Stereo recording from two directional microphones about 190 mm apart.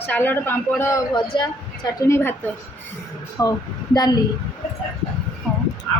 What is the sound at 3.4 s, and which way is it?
Speech, 20° left (ahead or behind).